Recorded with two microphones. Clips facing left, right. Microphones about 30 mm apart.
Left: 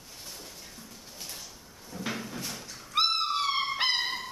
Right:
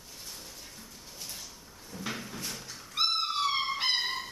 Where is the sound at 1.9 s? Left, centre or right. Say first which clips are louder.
Left 3 dB; centre.